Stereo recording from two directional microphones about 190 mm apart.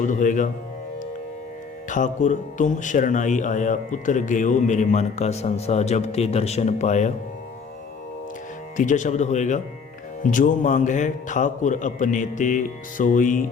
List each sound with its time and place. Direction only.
0.1 s speech: 40° left (ahead or behind)
1.9 s speech: 40° left (ahead or behind)
8.7 s speech: 40° left (ahead or behind)